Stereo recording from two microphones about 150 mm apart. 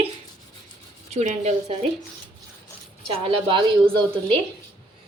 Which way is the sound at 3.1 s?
35° right (ahead or behind).